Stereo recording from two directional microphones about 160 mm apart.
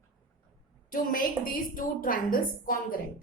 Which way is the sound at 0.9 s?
60° left (ahead or behind).